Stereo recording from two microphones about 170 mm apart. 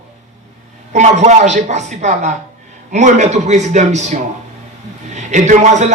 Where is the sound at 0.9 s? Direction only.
45° right (ahead or behind).